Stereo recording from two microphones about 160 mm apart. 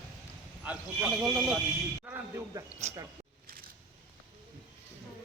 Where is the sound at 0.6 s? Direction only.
5° right (ahead or behind).